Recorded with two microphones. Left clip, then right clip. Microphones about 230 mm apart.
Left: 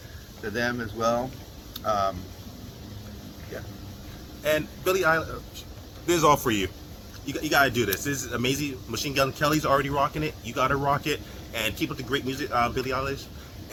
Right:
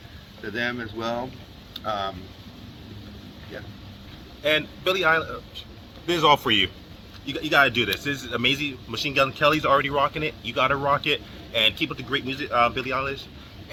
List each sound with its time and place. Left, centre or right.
0.5 s speech: centre
4.4 s speech: centre